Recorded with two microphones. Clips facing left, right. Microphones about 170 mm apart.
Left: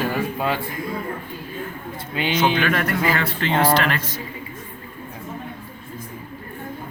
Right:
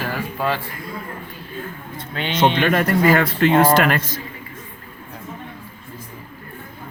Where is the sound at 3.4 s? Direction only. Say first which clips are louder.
Right 3 dB; 50° right (ahead or behind).